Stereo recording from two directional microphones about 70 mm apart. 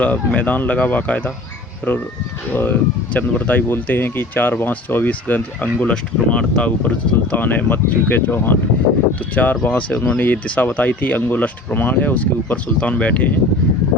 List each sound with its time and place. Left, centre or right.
0.0 s speech: left
2.5 s speech: left